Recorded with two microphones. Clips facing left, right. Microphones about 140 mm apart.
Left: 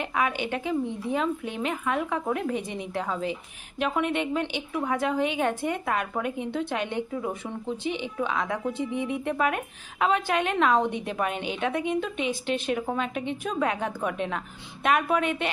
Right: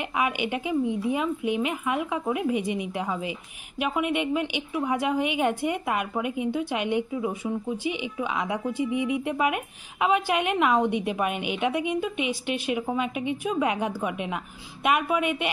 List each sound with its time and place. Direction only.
0.0 s speech: 15° right (ahead or behind)